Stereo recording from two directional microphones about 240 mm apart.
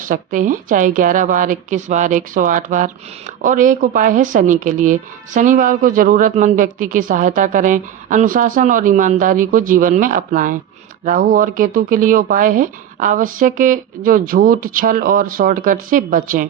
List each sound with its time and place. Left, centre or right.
0.0 s speech: right